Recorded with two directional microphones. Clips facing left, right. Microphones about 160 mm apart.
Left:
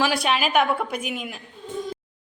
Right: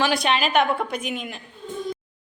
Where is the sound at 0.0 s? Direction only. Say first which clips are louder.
Right 1 dB; 5° left (ahead or behind).